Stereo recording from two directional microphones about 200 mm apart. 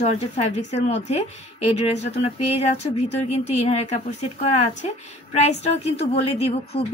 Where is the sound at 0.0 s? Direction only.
35° left (ahead or behind).